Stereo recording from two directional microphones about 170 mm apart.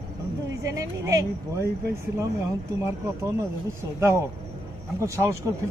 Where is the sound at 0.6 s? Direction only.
20° right (ahead or behind).